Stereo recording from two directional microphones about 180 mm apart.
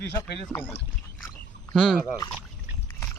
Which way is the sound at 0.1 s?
20° left (ahead or behind).